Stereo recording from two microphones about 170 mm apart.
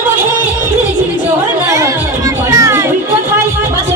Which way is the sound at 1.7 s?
20° right (ahead or behind).